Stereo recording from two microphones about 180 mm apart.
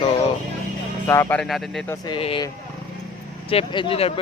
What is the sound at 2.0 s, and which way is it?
Speech, 30° left (ahead or behind).